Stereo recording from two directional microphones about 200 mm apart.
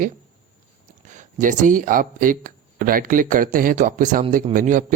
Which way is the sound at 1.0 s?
40° right (ahead or behind).